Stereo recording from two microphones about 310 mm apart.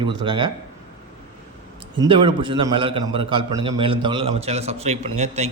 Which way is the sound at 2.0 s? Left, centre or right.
Centre.